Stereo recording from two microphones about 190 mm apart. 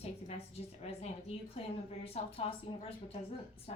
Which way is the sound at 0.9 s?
35° left (ahead or behind).